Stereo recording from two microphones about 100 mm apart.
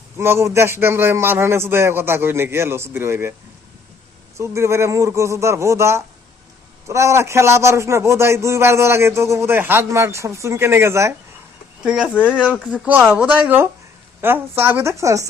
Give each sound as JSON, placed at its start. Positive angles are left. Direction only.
{"t": 0.2, "sound": "a man's voice", "side_deg": -25}
{"t": 4.4, "sound": "a man's voice", "side_deg": -30}
{"t": 11.8, "sound": "a man's voice", "side_deg": -5}